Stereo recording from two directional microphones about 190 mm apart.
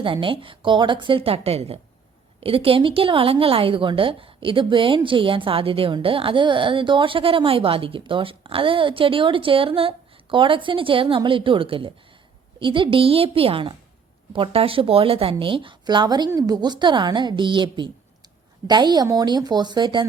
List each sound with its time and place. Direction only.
0.0 s a woman's voice: 25° right (ahead or behind)